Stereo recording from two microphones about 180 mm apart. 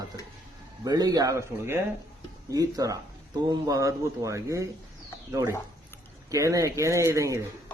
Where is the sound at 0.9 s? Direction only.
20° right (ahead or behind).